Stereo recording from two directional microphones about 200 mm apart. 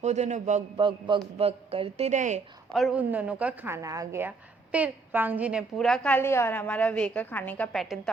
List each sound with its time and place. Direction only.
0.0 s speech: 35° right (ahead or behind)
0.9 s a man's voice: 25° right (ahead or behind)
2.7 s a woman's voice: 5° right (ahead or behind)